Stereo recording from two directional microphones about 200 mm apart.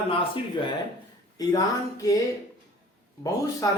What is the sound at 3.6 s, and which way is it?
Speech, 20° left (ahead or behind).